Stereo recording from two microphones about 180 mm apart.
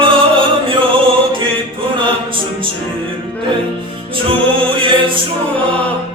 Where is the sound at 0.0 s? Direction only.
30° right (ahead or behind).